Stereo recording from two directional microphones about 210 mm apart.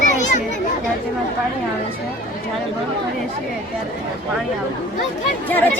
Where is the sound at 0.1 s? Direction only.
35° left (ahead or behind).